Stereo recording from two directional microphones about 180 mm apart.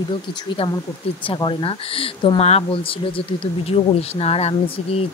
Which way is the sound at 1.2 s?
30° left (ahead or behind).